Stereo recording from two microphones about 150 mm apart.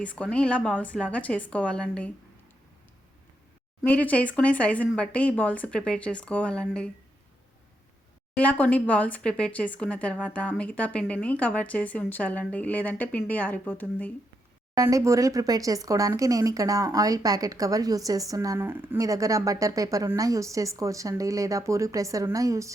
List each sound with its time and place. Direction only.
0.0 s a woman's voice: 10° left (ahead or behind)
3.8 s a woman's voice: 10° left (ahead or behind)
8.4 s a woman's voice: 10° left (ahead or behind)
14.8 s speech: 20° right (ahead or behind)